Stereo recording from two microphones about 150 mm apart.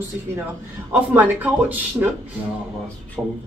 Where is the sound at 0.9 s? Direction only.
10° right (ahead or behind).